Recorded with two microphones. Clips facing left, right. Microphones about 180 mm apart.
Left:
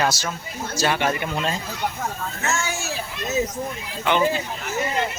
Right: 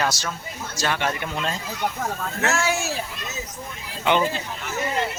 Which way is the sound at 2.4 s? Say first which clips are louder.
Right 4 dB; 70° right (ahead or behind).